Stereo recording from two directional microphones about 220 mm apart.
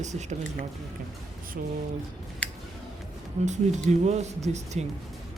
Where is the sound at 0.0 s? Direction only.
30° right (ahead or behind).